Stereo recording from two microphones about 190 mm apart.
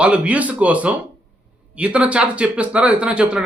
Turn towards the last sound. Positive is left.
turn(degrees=-5)  # may be behind; listen again after turning